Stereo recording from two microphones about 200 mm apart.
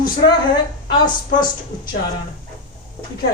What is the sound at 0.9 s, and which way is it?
Speech, 25° left (ahead or behind).